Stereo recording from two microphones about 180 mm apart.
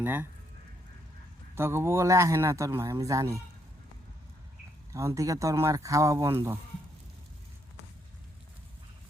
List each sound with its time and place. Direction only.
0.0 s speech: 10° right (ahead or behind)
1.5 s speech: 15° right (ahead or behind)
4.9 s speech: 15° right (ahead or behind)